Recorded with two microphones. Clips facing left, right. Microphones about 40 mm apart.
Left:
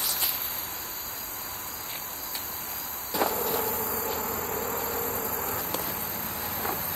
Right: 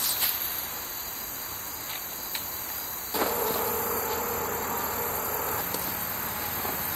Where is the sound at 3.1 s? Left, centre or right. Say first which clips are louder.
Even; centre.